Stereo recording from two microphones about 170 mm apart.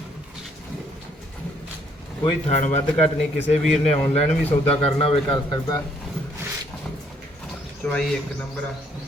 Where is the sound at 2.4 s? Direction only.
40° left (ahead or behind).